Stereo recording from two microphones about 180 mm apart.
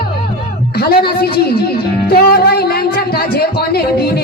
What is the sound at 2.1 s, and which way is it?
Music, 60° left (ahead or behind).